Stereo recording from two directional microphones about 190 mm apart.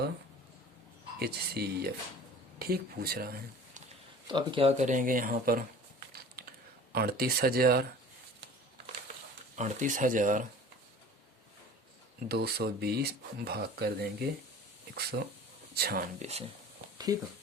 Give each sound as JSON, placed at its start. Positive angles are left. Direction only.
{"t": 1.2, "sound": "speech", "side_deg": -55}
{"t": 4.3, "sound": "speech", "side_deg": -25}
{"t": 6.9, "sound": "speech", "side_deg": -55}
{"t": 9.6, "sound": "speech", "side_deg": -40}
{"t": 12.3, "sound": "speech", "side_deg": -55}
{"t": 17.1, "sound": "speech", "side_deg": -20}